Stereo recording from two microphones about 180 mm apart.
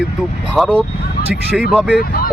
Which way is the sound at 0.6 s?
Centre (ahead or behind).